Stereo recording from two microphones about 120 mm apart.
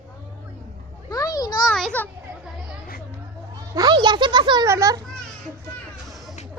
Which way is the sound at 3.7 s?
35° right (ahead or behind).